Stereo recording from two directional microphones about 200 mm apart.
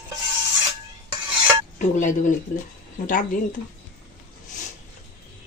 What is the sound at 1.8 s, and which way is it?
Speech, 40° left (ahead or behind).